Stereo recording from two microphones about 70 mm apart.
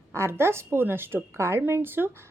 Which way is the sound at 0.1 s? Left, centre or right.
Right.